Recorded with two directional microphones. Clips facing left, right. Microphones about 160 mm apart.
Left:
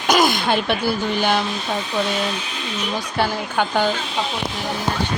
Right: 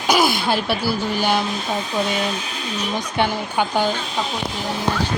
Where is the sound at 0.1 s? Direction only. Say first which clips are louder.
Left 1 dB; 5° right (ahead or behind).